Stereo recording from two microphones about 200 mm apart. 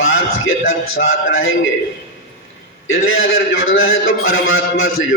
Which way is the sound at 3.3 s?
80° left.